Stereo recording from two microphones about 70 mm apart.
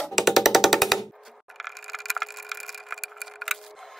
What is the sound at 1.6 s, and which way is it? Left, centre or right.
Wood, centre.